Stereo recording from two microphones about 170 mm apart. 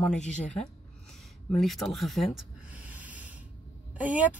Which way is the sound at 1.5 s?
Centre (ahead or behind).